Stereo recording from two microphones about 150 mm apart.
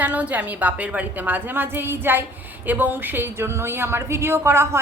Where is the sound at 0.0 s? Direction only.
10° right (ahead or behind).